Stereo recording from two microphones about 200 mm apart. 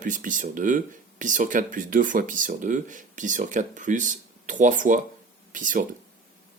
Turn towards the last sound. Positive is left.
turn(degrees=-40)  # may be behind; listen again after turning